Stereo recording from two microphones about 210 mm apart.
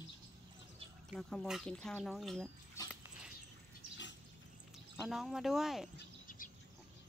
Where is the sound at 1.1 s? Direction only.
Centre (ahead or behind).